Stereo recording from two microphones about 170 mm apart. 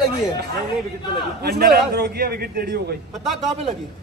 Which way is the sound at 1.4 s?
70° right (ahead or behind).